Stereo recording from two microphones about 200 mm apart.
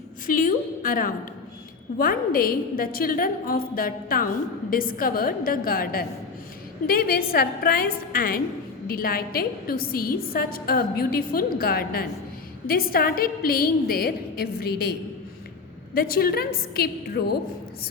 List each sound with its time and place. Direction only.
0.3 s a woman's voice: 45° left (ahead or behind)
16.0 s a woman's voice: 50° left (ahead or behind)